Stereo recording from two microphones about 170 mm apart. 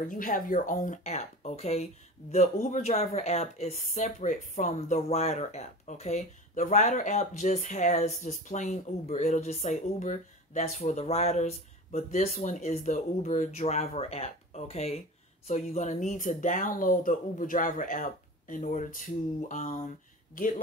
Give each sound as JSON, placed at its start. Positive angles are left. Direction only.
{"t": 0.1, "sound": "speech", "side_deg": 50}